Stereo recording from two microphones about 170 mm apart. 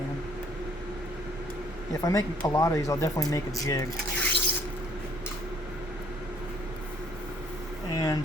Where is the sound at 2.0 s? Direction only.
20° left (ahead or behind).